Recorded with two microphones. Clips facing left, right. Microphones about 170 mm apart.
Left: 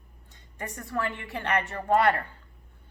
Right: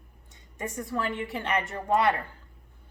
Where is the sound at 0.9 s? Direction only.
20° right (ahead or behind).